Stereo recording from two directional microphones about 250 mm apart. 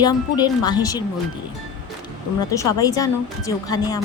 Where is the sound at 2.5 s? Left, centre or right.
Centre.